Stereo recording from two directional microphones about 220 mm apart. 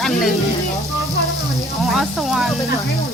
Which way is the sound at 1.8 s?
Centre (ahead or behind).